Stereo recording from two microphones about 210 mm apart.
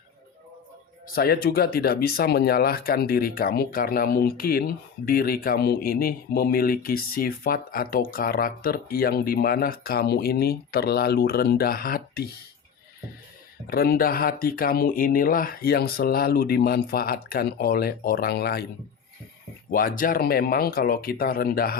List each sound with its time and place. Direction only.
1.0 s speech: 45° left (ahead or behind)
13.7 s speech: 45° left (ahead or behind)
19.7 s speech: 40° left (ahead or behind)